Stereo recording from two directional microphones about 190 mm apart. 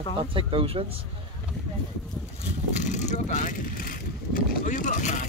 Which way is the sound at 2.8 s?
40° left (ahead or behind).